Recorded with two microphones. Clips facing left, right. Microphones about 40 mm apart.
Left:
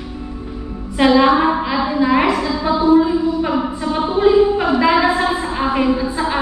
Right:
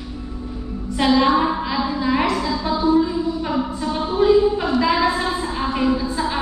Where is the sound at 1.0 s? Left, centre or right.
Centre.